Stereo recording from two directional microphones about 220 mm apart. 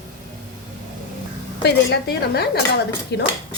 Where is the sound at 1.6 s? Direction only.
50° left (ahead or behind).